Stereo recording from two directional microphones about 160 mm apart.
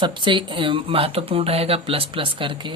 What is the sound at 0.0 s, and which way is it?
Speech, 30° right (ahead or behind).